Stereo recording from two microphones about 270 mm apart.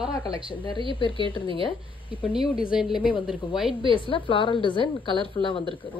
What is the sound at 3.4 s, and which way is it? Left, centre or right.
A woman's voice, centre.